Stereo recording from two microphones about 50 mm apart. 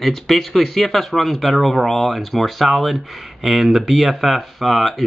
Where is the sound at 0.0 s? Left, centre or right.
Centre.